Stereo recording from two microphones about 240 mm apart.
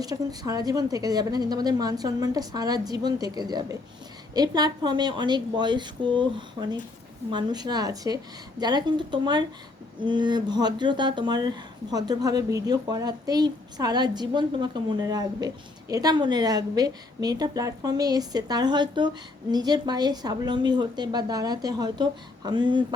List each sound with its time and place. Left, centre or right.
0.0 s speech: centre